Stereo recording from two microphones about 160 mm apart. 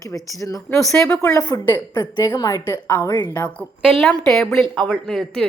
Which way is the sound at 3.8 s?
Centre (ahead or behind).